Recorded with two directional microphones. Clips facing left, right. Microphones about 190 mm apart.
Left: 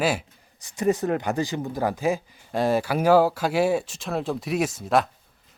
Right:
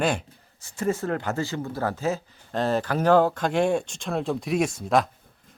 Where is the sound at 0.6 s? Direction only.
15° left (ahead or behind).